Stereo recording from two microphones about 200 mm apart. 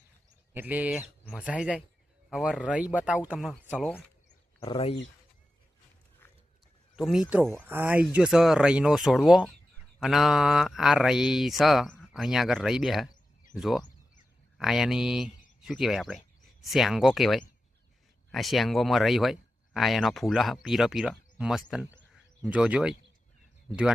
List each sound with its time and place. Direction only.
0.5 s speech: 10° right (ahead or behind)
4.6 s speech: 25° left (ahead or behind)
6.9 s speech: centre (ahead or behind)